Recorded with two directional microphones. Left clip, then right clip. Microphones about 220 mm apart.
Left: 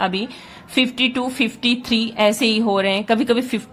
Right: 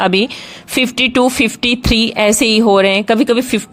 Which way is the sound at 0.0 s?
35° right (ahead or behind).